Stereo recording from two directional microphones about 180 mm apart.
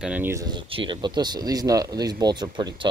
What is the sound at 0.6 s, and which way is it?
Speech, 30° right (ahead or behind).